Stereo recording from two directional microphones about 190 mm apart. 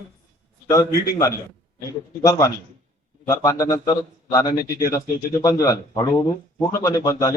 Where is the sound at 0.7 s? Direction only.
15° left (ahead or behind).